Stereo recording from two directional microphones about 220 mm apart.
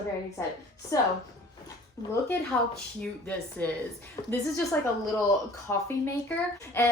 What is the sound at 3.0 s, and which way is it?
Speech, 5° left (ahead or behind).